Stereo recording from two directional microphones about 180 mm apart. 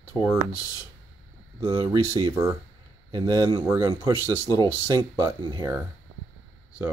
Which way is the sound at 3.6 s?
15° right (ahead or behind).